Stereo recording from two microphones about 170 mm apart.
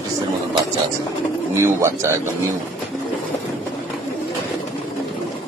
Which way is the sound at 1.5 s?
15° right (ahead or behind).